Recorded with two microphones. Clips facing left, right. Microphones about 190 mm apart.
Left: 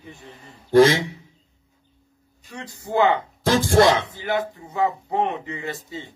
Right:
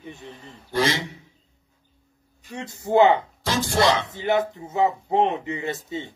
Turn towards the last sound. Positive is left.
turn(degrees=-20)  # may be behind; listen again after turning